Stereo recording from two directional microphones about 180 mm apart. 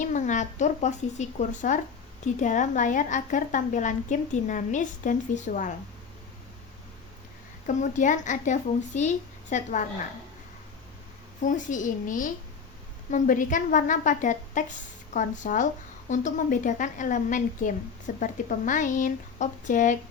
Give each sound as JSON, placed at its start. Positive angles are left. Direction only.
{"t": 0.0, "sound": "a woman's voice", "side_deg": 45}
{"t": 7.7, "sound": "a woman's voice", "side_deg": 45}
{"t": 11.4, "sound": "a woman's voice", "side_deg": 45}